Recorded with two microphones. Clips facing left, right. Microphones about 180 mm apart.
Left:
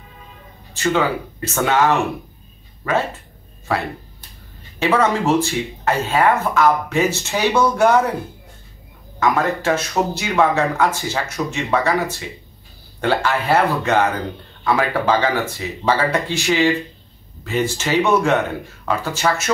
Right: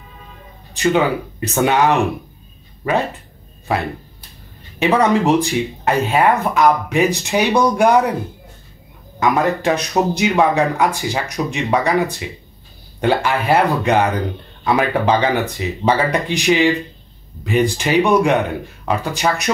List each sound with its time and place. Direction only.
0.7 s speech: 15° right (ahead or behind)
4.7 s speech: 15° right (ahead or behind)
9.2 s speech: 15° right (ahead or behind)